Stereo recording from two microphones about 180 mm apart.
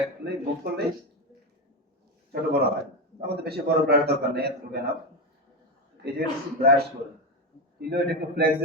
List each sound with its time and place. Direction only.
0.3 s a man's voice: 60° right (ahead or behind)
2.3 s a man's voice: 60° right (ahead or behind)
6.0 s a man's voice: 60° right (ahead or behind)
7.8 s a man's voice: 60° right (ahead or behind)